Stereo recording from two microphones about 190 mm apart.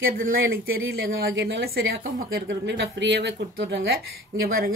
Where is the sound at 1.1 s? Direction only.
70° right (ahead or behind).